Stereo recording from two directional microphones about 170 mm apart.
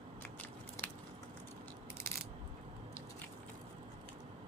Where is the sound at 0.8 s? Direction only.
15° left (ahead or behind).